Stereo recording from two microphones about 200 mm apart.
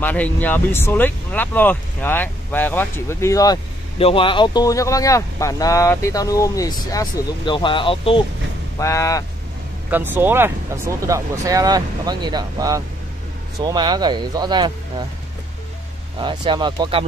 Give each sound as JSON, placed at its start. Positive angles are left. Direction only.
{"t": 0.0, "sound": "speech", "side_deg": 10}
{"t": 4.0, "sound": "speech", "side_deg": 25}
{"t": 8.7, "sound": "speech", "side_deg": 15}
{"t": 9.8, "sound": "speech", "side_deg": -10}
{"t": 16.2, "sound": "speech", "side_deg": -25}